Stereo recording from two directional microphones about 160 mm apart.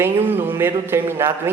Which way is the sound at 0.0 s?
15° right (ahead or behind).